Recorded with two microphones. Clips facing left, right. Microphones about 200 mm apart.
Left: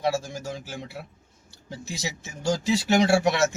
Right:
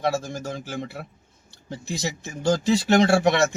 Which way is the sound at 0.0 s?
5° left (ahead or behind).